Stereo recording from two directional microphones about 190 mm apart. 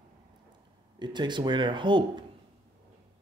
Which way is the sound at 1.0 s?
25° right (ahead or behind).